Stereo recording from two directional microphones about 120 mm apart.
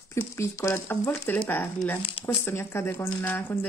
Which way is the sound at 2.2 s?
20° left (ahead or behind).